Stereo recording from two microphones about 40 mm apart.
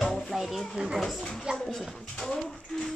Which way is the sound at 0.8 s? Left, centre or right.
Right.